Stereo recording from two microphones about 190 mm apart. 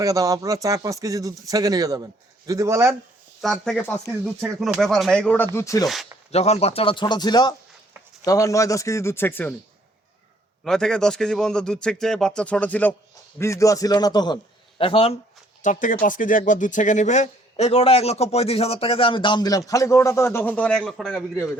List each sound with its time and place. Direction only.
0.0 s speech: 15° right (ahead or behind)
3.4 s a man's voice: 5° left (ahead or behind)
4.4 s a man's voice: centre (ahead or behind)
5.5 s speech: 15° left (ahead or behind)
6.3 s speech: 35° left (ahead or behind); by 9.6 s 10° left (ahead or behind)
10.6 s a man's voice: 5° left (ahead or behind); by 15.1 s 30° left (ahead or behind)
15.6 s speech: 45° left (ahead or behind); by 21.2 s 5° left (ahead or behind)